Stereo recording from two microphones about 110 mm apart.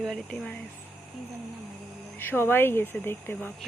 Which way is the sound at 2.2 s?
20° left (ahead or behind).